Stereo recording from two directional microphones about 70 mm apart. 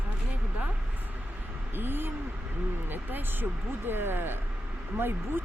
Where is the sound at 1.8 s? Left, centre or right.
Right.